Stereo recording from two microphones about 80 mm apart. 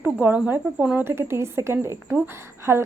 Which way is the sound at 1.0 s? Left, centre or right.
Right.